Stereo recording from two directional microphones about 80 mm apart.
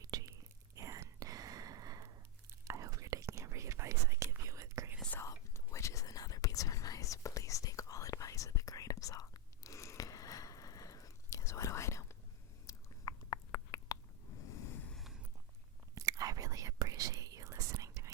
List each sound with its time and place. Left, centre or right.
0.0 s whispering: right
5.2 s whispering: left
12.6 s chewing: left
14.5 s a sound: left
14.9 s a sound: centre
16.0 s whispering: right